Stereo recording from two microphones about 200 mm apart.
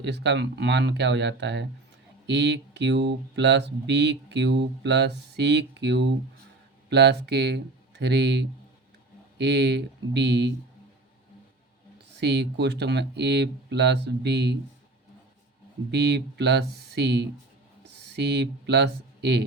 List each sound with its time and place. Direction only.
0.0 s speech: 60° right (ahead or behind)
12.1 s speech: 60° right (ahead or behind)
15.9 s speech: 55° right (ahead or behind)